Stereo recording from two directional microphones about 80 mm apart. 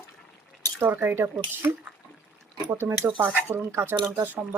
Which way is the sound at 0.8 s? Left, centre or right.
Right.